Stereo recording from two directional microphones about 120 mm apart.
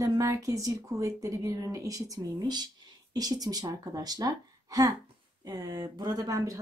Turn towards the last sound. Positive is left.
turn(degrees=-30)  # may be behind; listen again after turning